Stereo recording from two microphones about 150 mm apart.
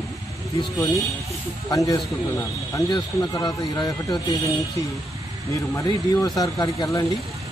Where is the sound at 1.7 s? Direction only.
25° left (ahead or behind).